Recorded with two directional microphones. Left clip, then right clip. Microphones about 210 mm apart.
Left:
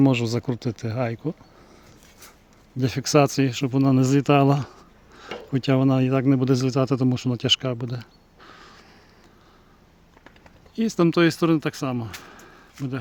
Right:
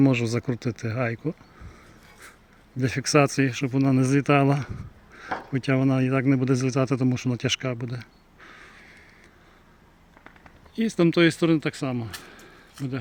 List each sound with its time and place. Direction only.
0.0 s speech: centre (ahead or behind)
2.7 s speech: 5° left (ahead or behind)
8.4 s crow: 5° left (ahead or behind)
10.8 s speech: centre (ahead or behind)
12.8 s speech: 35° right (ahead or behind)